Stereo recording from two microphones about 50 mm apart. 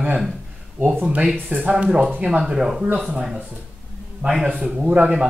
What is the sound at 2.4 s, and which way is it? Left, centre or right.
A man's voice, centre.